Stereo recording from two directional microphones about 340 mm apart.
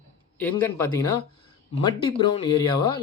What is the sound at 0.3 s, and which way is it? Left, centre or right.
Speech, centre.